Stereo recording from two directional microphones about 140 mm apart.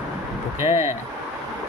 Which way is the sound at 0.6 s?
45° left (ahead or behind).